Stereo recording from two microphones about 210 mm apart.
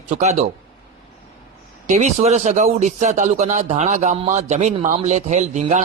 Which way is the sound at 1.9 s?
35° right (ahead or behind).